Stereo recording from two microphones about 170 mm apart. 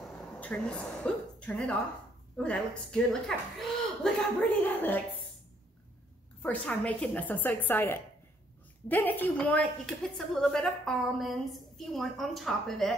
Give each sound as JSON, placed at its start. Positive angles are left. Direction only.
{"t": 0.0, "sound": "a woman's voice", "side_deg": 5}
{"t": 6.4, "sound": "a woman's voice", "side_deg": 5}